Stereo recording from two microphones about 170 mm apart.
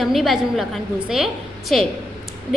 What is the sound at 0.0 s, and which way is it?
A woman's voice, centre (ahead or behind).